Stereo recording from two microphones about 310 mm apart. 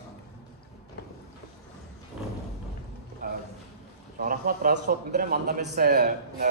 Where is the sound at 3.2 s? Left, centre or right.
Right.